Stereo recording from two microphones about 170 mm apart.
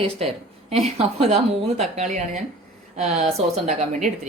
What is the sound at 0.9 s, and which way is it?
Speech, 35° right (ahead or behind).